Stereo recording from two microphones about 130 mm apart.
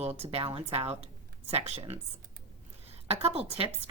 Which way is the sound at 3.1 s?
50° right (ahead or behind).